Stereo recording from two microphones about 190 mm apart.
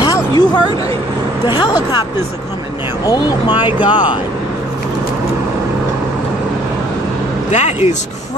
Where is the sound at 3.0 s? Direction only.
20° left (ahead or behind).